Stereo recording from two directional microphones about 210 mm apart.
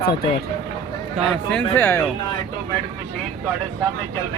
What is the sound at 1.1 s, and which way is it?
Speech, centre (ahead or behind).